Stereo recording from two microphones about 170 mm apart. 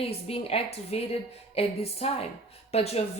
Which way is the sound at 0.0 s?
35° left (ahead or behind).